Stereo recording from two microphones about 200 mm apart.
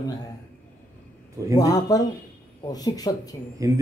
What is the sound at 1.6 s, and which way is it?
Speech, 20° left (ahead or behind).